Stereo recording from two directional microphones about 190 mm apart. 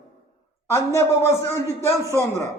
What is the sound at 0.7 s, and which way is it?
Speech, 15° left (ahead or behind).